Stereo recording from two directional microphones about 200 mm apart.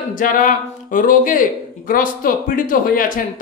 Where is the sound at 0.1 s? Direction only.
40° left (ahead or behind).